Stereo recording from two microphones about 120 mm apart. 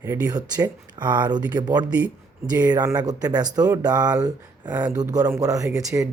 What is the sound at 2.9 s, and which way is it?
Speech, 30° right (ahead or behind).